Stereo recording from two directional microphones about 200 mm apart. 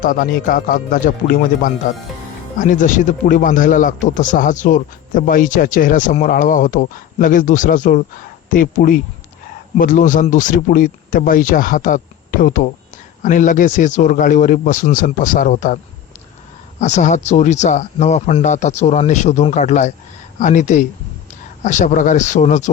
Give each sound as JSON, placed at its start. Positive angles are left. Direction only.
{"t": 0.0, "sound": "a man's voice", "side_deg": 45}
{"t": 16.8, "sound": "a man's voice", "side_deg": 35}